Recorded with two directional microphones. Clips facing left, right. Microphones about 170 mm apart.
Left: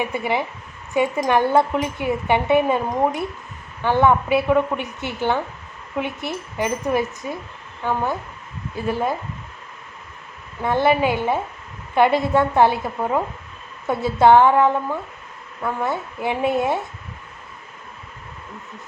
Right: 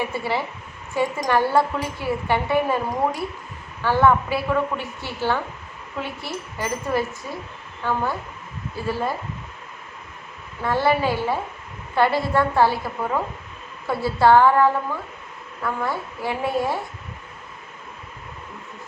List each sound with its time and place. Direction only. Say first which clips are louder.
0.0 s a woman's voice: left 2 dB; 20° left (ahead or behind)
10.6 s a woman's voice: left 2 dB; 20° left (ahead or behind)